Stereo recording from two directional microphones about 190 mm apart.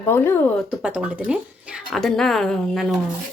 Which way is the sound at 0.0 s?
15° left (ahead or behind).